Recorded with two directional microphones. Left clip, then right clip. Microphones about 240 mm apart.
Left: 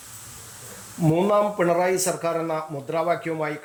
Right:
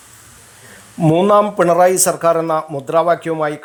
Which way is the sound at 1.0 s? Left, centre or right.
Centre.